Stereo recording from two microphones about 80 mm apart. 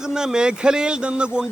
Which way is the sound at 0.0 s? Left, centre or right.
Centre.